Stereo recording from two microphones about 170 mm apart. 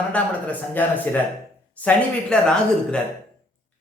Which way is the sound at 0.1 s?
10° left (ahead or behind).